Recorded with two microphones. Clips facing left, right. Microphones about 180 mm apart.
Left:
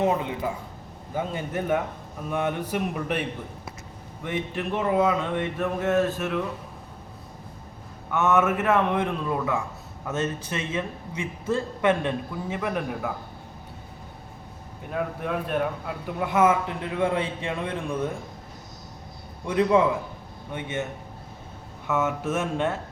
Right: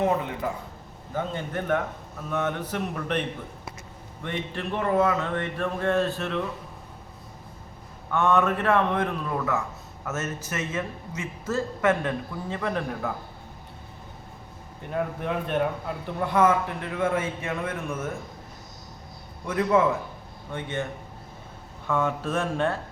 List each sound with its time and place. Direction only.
0.0 s a man's voice: 20° left (ahead or behind)
1.1 s speech: 10° left (ahead or behind)
8.3 s speech: 5° left (ahead or behind)
8.6 s speech: 20° left (ahead or behind)
10.2 s a man's voice: 25° left (ahead or behind); by 13.1 s 10° left (ahead or behind)
14.9 s a man's voice: centre (ahead or behind)
19.5 s speech: 15° left (ahead or behind)
22.0 s a man's voice: 20° left (ahead or behind)